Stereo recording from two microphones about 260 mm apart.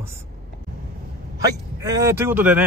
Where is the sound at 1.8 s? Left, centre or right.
Centre.